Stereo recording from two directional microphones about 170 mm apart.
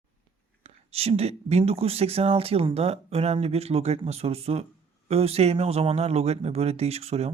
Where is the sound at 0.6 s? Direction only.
35° right (ahead or behind).